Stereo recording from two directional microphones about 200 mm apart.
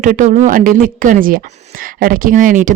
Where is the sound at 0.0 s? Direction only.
40° right (ahead or behind).